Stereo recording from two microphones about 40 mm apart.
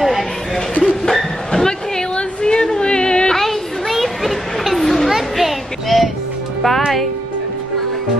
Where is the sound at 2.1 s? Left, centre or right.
Left.